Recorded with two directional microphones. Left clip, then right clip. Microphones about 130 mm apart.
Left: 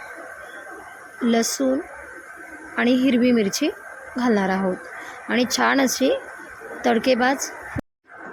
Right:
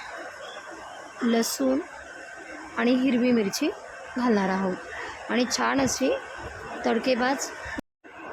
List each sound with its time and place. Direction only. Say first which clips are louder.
1.3 s a woman's voice: left 4 dB; 15° left (ahead or behind)